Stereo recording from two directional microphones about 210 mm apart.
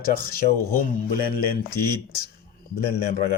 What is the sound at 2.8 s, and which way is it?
Speech, 45° left (ahead or behind).